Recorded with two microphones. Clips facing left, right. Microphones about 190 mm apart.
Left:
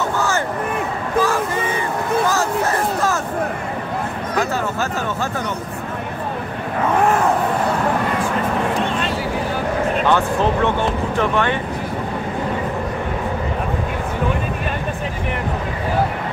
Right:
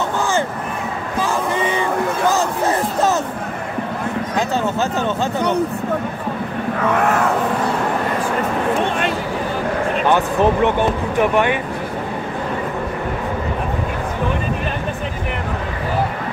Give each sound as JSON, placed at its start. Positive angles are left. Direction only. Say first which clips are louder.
{"t": 10.0, "sound": "speech", "louder": "right 4 dB", "side_deg": -15}